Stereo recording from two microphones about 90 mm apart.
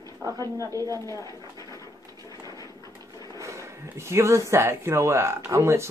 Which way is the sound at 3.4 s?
30° right (ahead or behind).